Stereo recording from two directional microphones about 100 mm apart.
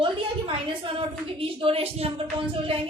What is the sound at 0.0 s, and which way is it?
A woman's voice, 60° right (ahead or behind).